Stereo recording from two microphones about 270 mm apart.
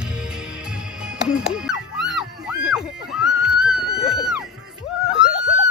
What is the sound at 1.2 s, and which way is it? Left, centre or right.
Music, centre.